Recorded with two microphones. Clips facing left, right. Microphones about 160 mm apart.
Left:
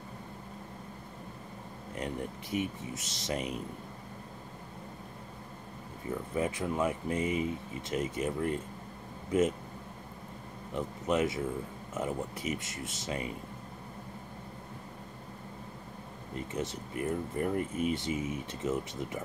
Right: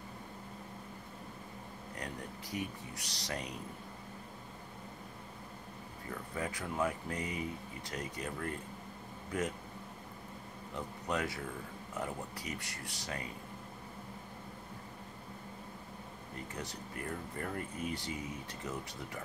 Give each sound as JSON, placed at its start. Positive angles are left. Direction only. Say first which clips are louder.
{"t": 2.0, "sound": "speech", "louder": "left 8 dB", "side_deg": 20}
{"t": 6.0, "sound": "speech", "louder": "left 8 dB", "side_deg": 20}
{"t": 10.7, "sound": "speech", "louder": "left 7 dB", "side_deg": 20}
{"t": 16.3, "sound": "speech", "louder": "left 8 dB", "side_deg": 20}